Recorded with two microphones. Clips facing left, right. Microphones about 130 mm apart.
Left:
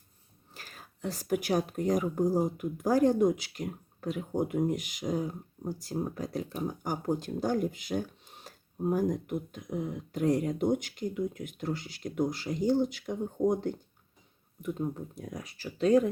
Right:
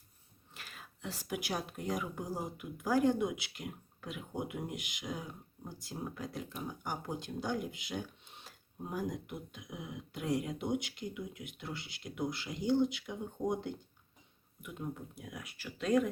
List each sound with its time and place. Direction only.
0.5 s speech: 40° left (ahead or behind)